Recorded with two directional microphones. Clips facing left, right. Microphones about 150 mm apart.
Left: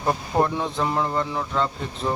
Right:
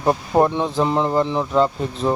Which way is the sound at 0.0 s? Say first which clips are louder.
Right 5 dB; 30° right (ahead or behind).